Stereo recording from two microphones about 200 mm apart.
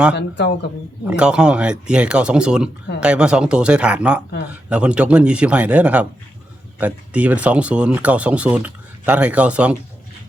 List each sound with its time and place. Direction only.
0.2 s speech: 60° left (ahead or behind)
1.0 s speech: 5° right (ahead or behind)